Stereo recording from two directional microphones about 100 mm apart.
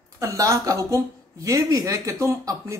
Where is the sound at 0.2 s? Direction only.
35° right (ahead or behind).